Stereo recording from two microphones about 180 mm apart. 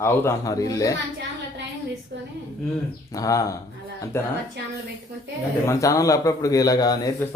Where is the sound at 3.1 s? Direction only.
20° left (ahead or behind).